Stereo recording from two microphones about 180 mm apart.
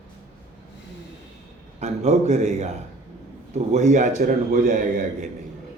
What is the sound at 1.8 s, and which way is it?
Speech, 40° right (ahead or behind).